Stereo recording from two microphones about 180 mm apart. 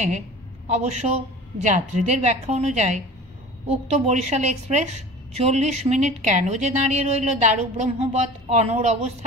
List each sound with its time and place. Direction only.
0.7 s a woman's voice: 40° right (ahead or behind)